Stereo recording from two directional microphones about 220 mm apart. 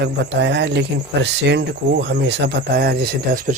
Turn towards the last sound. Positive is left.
turn(degrees=-45)  # may be behind; listen again after turning